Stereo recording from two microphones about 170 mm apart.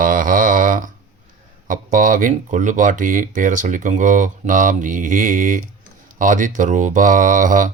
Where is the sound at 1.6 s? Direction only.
50° right (ahead or behind).